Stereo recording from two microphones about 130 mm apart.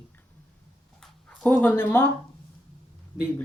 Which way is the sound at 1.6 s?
15° left (ahead or behind).